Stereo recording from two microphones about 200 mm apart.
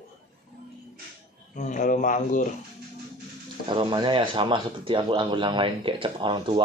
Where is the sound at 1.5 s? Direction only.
40° left (ahead or behind).